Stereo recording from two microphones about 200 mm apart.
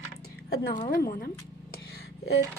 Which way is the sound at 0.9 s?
45° left (ahead or behind).